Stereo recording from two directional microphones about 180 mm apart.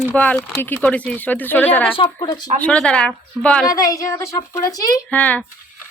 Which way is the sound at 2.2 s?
25° left (ahead or behind).